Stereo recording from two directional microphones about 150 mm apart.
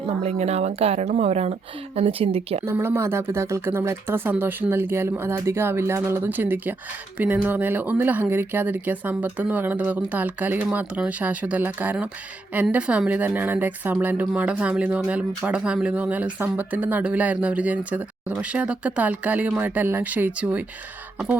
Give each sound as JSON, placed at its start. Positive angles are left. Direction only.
{"t": 0.2, "sound": "a woman's voice", "side_deg": -45}
{"t": 2.6, "sound": "speech", "side_deg": -15}